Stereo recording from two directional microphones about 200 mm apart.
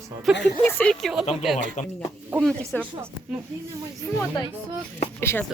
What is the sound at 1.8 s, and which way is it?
Speech, 40° left (ahead or behind).